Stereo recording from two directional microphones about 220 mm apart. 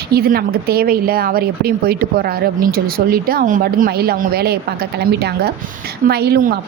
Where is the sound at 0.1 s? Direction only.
45° right (ahead or behind).